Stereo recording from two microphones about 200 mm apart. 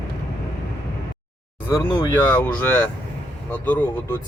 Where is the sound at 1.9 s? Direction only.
25° left (ahead or behind).